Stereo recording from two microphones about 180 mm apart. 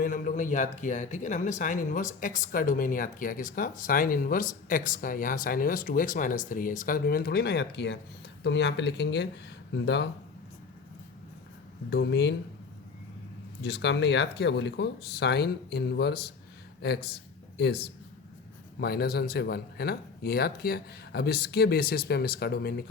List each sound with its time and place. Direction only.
0.0 s speech: 50° left (ahead or behind); by 10.1 s 75° left (ahead or behind)
11.9 s speech: 70° left (ahead or behind)
13.6 s speech: 70° left (ahead or behind)